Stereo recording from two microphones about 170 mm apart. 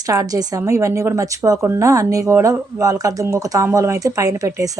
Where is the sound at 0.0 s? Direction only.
20° right (ahead or behind).